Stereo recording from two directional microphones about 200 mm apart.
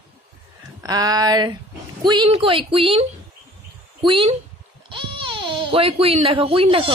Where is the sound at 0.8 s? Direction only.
20° right (ahead or behind).